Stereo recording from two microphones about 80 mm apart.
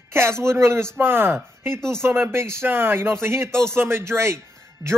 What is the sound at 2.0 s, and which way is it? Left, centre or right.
A man's voice, right.